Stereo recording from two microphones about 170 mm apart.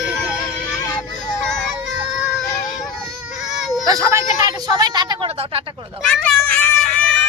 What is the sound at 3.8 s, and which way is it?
Speech, 20° right (ahead or behind).